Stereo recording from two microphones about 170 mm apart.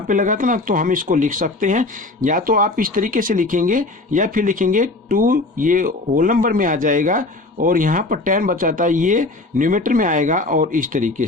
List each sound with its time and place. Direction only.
0.1 s speech: 50° right (ahead or behind)